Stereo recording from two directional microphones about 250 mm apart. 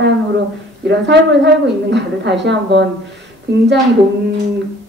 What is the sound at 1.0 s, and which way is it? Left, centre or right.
A woman's voice, right.